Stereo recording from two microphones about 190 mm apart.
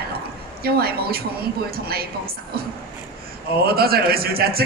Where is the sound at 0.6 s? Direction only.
55° right (ahead or behind).